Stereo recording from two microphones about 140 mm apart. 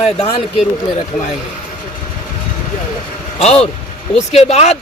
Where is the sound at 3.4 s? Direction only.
50° left (ahead or behind).